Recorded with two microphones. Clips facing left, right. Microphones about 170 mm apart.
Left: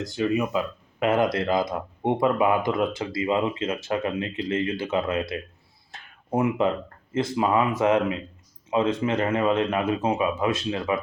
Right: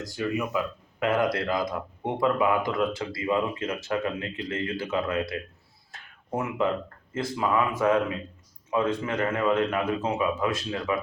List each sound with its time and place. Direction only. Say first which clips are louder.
0.0 s speech: left 5 dB; 25° left (ahead or behind)
5.9 s a sound: left 5 dB; 20° left (ahead or behind)
7.1 s speech: left 4 dB; 20° left (ahead or behind)